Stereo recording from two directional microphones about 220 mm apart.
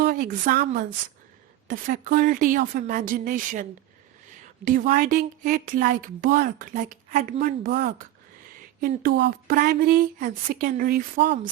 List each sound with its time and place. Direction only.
0.0 s a woman's voice: 45° right (ahead or behind)